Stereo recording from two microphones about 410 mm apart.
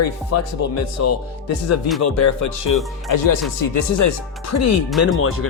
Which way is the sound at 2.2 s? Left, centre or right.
Left.